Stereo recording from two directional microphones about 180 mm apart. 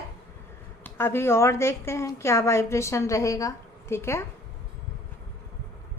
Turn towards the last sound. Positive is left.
turn(degrees=15)  # may be behind; listen again after turning